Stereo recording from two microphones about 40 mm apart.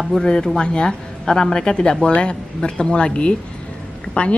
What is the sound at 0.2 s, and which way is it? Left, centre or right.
A woman's voice, centre.